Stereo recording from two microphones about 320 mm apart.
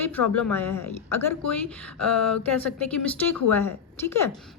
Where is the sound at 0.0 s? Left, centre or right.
Centre.